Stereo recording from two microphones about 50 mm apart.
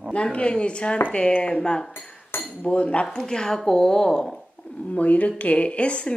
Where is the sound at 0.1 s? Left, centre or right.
Left.